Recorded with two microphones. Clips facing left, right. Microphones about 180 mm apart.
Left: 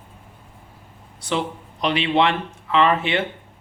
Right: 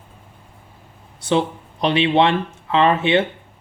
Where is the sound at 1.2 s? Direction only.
25° right (ahead or behind).